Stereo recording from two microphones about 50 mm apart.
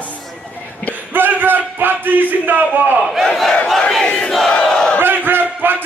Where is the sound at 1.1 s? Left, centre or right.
Right.